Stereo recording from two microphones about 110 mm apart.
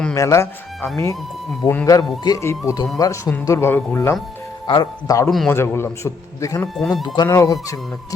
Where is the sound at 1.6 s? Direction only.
45° left (ahead or behind).